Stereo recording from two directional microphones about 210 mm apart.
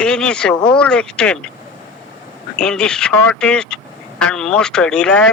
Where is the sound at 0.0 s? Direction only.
5° left (ahead or behind).